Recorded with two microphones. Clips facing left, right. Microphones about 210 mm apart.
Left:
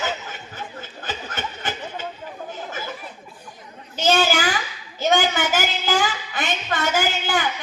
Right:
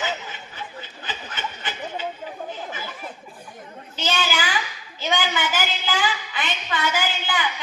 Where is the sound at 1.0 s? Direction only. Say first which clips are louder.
Left 3 dB; 45° left (ahead or behind).